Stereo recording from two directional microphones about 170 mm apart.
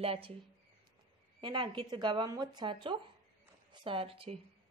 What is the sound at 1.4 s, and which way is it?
A woman's voice, 25° right (ahead or behind).